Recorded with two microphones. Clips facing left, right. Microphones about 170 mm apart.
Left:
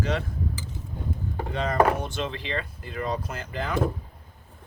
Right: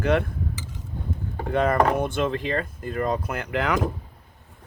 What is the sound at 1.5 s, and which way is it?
Speech, 55° right (ahead or behind).